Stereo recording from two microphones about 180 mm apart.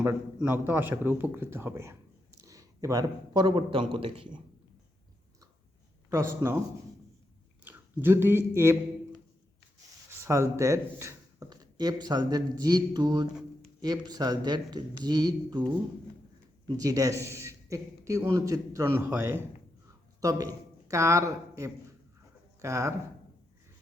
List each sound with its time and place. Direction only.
0.0 s a man's voice: 10° right (ahead or behind); by 4.4 s 30° right (ahead or behind)
6.1 s a man's voice: 15° right (ahead or behind)
7.6 s speech: 10° right (ahead or behind)
10.2 s speech: 15° right (ahead or behind)
16.6 s a man's voice: 20° right (ahead or behind)